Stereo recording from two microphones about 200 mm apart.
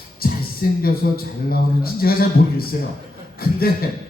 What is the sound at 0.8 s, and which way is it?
Speech, 50° left (ahead or behind).